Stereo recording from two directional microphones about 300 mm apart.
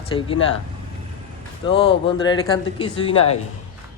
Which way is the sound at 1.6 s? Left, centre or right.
Centre.